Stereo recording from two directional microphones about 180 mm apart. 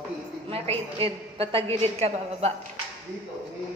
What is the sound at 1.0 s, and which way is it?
A woman's voice, 30° right (ahead or behind).